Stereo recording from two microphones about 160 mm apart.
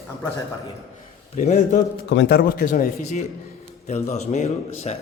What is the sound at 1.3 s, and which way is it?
Speech, 45° left (ahead or behind).